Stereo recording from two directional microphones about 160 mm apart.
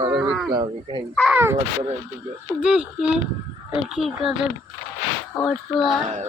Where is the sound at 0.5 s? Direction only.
30° right (ahead or behind).